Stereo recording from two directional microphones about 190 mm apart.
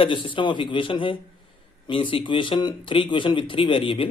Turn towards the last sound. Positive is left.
turn(degrees=30)  # may be behind; listen again after turning